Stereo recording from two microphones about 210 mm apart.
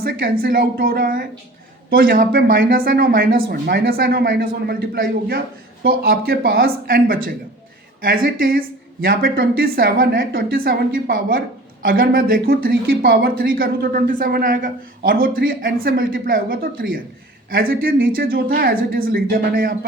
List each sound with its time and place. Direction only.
0.0 s speech: 45° right (ahead or behind)